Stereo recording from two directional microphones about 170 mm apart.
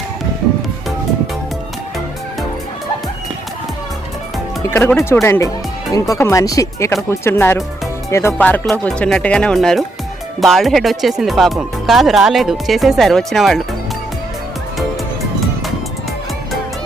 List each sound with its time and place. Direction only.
4.7 s speech: 10° left (ahead or behind)
14.8 s music: centre (ahead or behind)